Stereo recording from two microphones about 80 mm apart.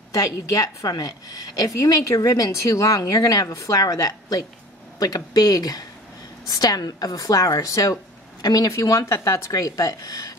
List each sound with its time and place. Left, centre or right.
0.1 s a woman's voice: left